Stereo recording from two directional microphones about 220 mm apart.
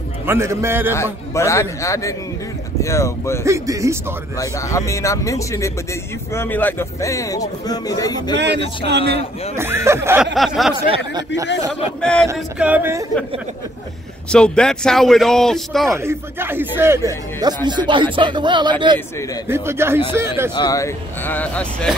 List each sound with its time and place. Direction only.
0.3 s speech: 10° right (ahead or behind)
0.9 s a man's voice: 15° left (ahead or behind)
3.4 s speech: 15° right (ahead or behind)
4.4 s a man's voice: 15° left (ahead or behind)
8.4 s a man's voice: 50° right (ahead or behind)
9.6 s speech: 10° right (ahead or behind)
12.0 s speech: 5° left (ahead or behind)
12.3 s speech: 5° right (ahead or behind)
14.3 s speech: 5° left (ahead or behind)
16.0 s speech: 10° right (ahead or behind)
20.5 s a man's voice: 15° left (ahead or behind)